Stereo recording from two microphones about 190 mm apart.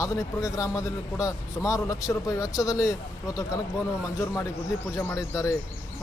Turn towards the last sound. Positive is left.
turn(degrees=15)  # may be behind; listen again after turning